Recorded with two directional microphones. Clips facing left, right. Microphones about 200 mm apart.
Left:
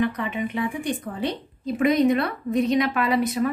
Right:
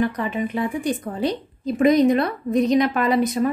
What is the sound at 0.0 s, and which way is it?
A woman's voice, 40° right (ahead or behind).